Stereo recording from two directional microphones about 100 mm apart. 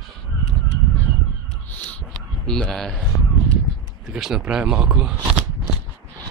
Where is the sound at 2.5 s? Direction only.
5° left (ahead or behind).